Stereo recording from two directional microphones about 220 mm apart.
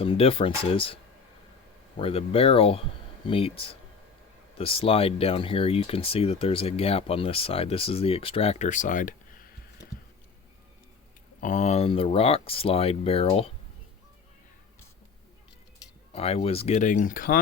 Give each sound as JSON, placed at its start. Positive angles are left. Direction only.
{"t": 0.0, "sound": "speech", "side_deg": 25}
{"t": 2.0, "sound": "speech", "side_deg": 25}
{"t": 11.3, "sound": "speech", "side_deg": 35}
{"t": 16.1, "sound": "speech", "side_deg": 25}